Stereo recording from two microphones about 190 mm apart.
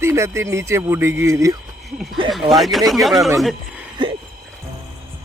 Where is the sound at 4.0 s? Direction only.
25° right (ahead or behind).